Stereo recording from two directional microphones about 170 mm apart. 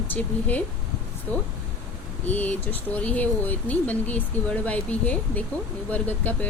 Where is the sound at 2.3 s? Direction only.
10° left (ahead or behind).